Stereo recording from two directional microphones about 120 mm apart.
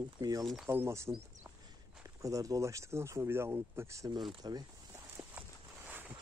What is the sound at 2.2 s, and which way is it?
Speech, 30° right (ahead or behind).